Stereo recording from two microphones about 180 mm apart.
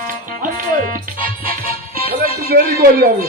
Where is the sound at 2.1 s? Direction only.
60° right (ahead or behind).